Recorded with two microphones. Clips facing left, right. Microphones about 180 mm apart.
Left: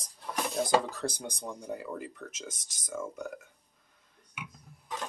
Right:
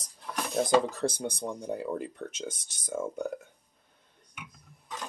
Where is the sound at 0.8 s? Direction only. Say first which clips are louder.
Right 5 dB; 25° right (ahead or behind).